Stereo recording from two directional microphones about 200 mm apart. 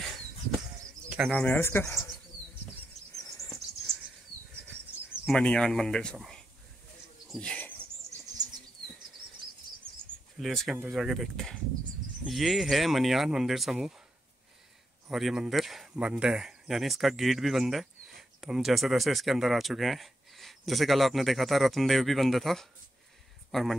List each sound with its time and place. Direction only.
1.1 s speech: centre (ahead or behind)
3.4 s a sound: centre (ahead or behind)
5.2 s speech: 5° left (ahead or behind)
7.2 s insect: 5° left (ahead or behind)
10.4 s speech: centre (ahead or behind)
15.0 s speech: centre (ahead or behind)